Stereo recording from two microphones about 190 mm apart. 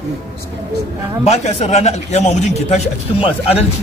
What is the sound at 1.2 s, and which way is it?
Speech, 35° left (ahead or behind).